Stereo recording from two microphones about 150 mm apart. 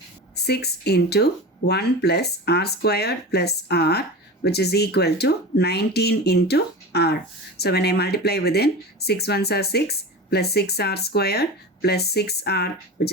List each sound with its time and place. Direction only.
0.3 s speech: 90° left